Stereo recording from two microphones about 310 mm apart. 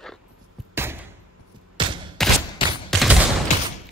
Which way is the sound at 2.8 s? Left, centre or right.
Centre.